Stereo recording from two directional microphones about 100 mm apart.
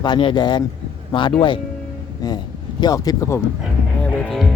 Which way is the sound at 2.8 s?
40° left (ahead or behind).